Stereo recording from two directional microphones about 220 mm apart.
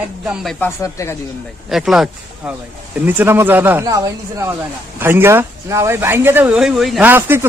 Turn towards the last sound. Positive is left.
turn(degrees=-10)  # may be behind; listen again after turning